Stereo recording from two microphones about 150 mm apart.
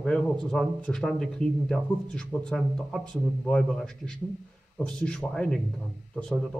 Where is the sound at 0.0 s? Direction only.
5° left (ahead or behind).